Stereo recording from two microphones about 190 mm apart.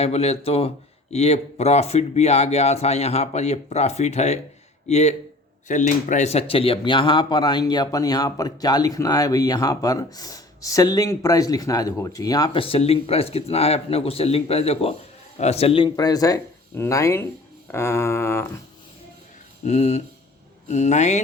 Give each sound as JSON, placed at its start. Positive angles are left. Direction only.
{"t": 0.0, "sound": "speech", "side_deg": 35}
{"t": 17.7, "sound": "a sound", "side_deg": 15}
{"t": 19.6, "sound": "speech", "side_deg": 35}